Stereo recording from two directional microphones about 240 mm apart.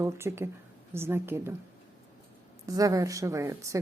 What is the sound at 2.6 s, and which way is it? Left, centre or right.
Speech, centre.